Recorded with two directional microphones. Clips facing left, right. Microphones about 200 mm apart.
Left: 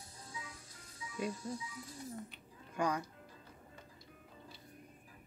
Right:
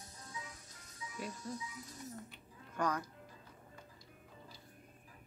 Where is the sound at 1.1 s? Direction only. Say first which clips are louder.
Left 4 dB; 25° left (ahead or behind).